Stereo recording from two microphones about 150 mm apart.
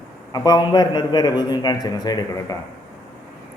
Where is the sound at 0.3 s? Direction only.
25° left (ahead or behind).